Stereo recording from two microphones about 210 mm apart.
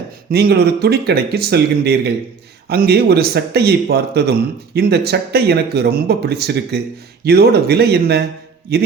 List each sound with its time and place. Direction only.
0.3 s speech: 50° right (ahead or behind)